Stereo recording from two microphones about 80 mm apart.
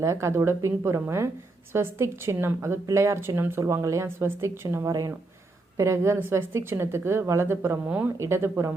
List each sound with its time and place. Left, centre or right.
0.0 s a woman's voice: right
7.9 s speech: centre
8.2 s a woman's voice: right